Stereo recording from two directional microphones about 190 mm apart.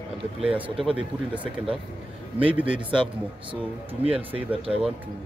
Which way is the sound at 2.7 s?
25° right (ahead or behind).